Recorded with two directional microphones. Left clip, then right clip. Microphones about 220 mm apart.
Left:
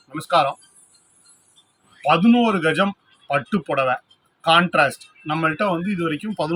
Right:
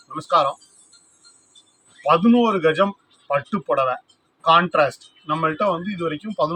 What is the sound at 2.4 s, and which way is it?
Speech, 5° right (ahead or behind).